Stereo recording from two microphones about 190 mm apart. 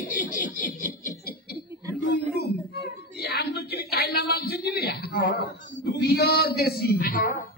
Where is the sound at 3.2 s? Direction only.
55° left (ahead or behind).